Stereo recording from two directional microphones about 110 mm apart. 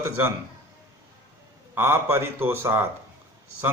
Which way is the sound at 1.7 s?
20° right (ahead or behind).